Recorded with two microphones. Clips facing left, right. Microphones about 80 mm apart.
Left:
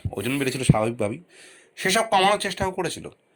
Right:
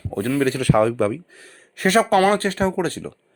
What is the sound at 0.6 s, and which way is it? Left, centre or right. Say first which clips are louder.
Speech: right 3 dB; right.